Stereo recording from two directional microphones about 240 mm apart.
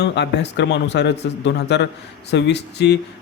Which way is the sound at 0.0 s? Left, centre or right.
Left.